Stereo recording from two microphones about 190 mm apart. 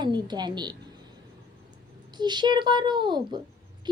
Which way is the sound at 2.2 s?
20° right (ahead or behind).